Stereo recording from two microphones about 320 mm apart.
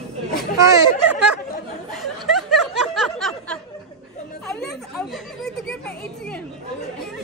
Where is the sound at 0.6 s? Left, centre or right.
Centre.